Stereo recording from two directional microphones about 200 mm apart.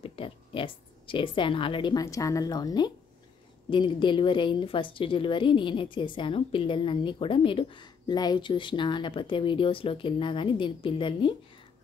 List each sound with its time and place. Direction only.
0.0 s a woman's voice: 25° left (ahead or behind)